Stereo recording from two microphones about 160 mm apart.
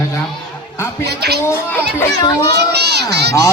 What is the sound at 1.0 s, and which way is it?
Speech, 90° right.